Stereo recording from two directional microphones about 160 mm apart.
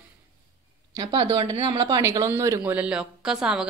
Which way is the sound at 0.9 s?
35° right (ahead or behind).